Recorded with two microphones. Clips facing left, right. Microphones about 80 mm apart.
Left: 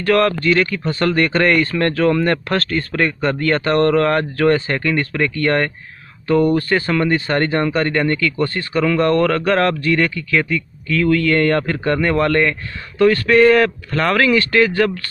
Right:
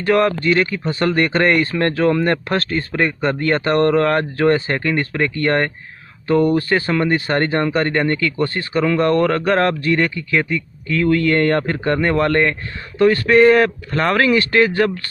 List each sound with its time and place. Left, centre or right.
0.0 s a man's voice: right